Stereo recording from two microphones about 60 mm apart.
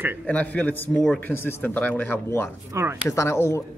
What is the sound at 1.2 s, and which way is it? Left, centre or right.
Speech, left.